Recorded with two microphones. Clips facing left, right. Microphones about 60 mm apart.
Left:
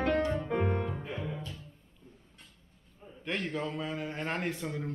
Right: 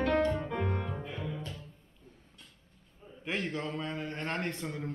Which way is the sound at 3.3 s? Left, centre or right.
Centre.